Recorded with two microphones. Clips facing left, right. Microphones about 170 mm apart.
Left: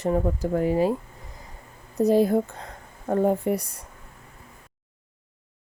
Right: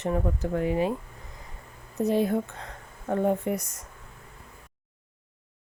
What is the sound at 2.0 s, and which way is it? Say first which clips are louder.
Speech: left 5 dB; 35° left (ahead or behind).